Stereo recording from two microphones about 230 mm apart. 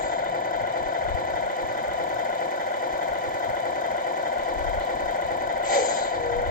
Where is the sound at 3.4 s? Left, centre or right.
Left.